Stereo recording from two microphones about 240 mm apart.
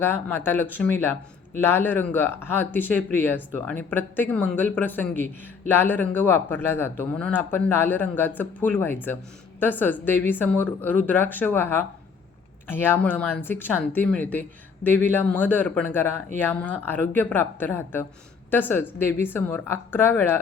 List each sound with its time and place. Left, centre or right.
0.0 s speech: centre